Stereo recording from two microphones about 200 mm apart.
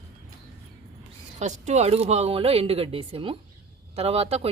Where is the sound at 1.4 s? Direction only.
35° right (ahead or behind).